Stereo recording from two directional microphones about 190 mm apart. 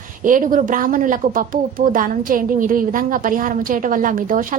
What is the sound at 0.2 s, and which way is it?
Speech, 45° right (ahead or behind).